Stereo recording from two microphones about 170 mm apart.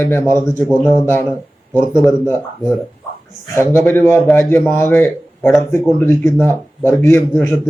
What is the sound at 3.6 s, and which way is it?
A man's voice, 15° left (ahead or behind).